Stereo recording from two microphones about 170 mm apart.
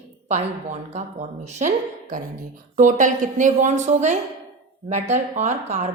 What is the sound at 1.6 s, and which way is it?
A woman's voice, 50° right (ahead or behind).